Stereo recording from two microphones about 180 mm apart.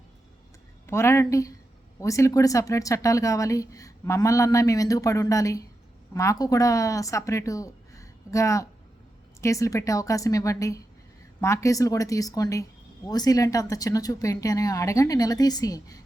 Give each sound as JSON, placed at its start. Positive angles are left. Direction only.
{"t": 0.9, "sound": "speech", "side_deg": 15}